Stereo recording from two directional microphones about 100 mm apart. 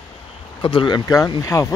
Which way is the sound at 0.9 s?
35° left (ahead or behind).